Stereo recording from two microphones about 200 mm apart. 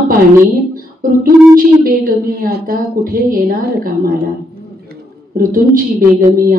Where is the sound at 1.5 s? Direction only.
50° right (ahead or behind).